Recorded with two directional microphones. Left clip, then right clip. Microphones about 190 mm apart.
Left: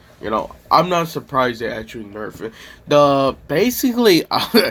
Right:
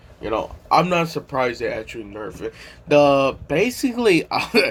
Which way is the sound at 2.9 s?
60° left (ahead or behind).